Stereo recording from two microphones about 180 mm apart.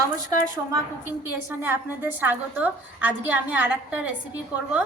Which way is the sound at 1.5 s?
10° right (ahead or behind).